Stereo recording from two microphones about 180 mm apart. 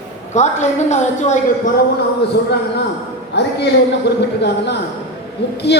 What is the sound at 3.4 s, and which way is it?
Speech, 70° left (ahead or behind).